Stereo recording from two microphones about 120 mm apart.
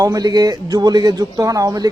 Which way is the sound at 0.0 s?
30° right (ahead or behind).